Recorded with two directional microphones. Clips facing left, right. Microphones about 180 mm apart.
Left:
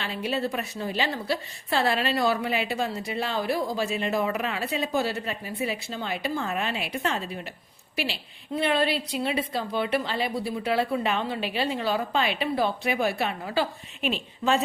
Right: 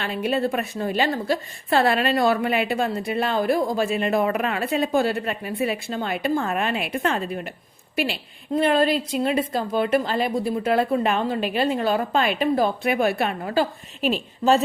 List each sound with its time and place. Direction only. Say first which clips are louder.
0.0 s a woman's voice: right 5 dB; 55° right (ahead or behind); by 14.6 s 40° right (ahead or behind)